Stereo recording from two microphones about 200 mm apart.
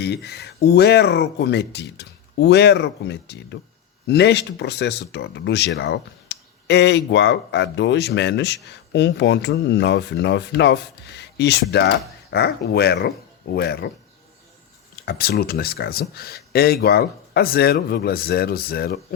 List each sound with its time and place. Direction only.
0.0 s speech: 55° left (ahead or behind)
14.9 s speech: 50° left (ahead or behind)